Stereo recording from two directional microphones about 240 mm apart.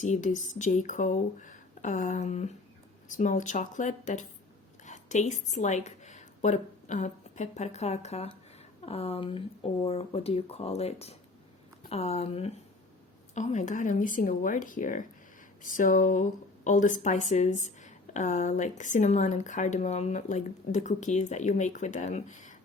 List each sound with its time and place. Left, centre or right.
0.0 s a woman's voice: left